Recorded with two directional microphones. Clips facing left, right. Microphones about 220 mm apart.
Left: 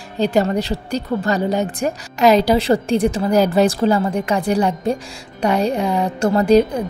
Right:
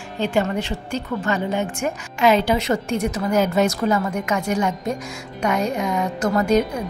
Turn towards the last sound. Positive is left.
turn(degrees=30)  # may be behind; listen again after turning